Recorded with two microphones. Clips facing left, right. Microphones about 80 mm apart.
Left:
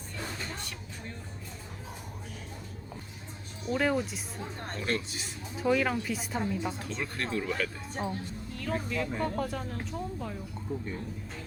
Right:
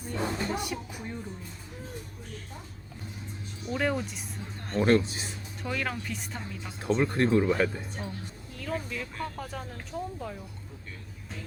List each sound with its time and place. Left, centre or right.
0.1 s music: right
0.5 s speech: centre
3.7 s speech: centre
4.7 s speech: right
5.6 s speech: centre
6.8 s speech: right
8.0 s a woman's voice: left
8.5 s speech: centre